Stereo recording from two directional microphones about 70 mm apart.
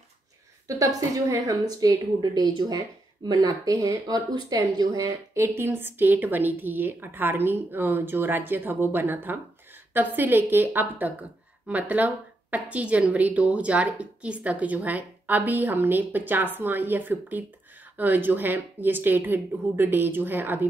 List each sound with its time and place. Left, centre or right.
0.7 s a woman's voice: right
3.3 s a woman's voice: right
5.3 s speech: right